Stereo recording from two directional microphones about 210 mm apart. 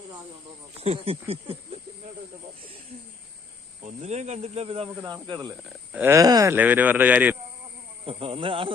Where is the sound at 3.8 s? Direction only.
30° right (ahead or behind).